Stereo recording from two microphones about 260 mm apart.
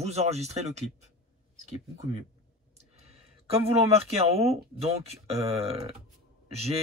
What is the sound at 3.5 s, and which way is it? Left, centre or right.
Speech, right.